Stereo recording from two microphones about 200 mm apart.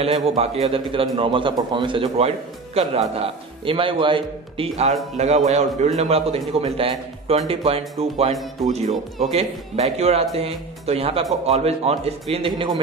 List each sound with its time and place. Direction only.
0.0 s a man's voice: 30° right (ahead or behind)